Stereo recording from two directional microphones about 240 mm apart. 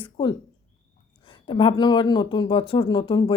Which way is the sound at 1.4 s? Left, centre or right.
Left.